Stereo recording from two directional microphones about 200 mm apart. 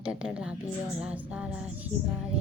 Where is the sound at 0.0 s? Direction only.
5° right (ahead or behind).